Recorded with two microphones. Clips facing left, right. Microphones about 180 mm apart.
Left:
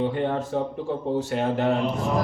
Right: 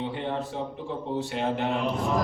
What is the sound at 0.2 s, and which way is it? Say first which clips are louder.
Speech: left 6 dB; 50° left (ahead or behind).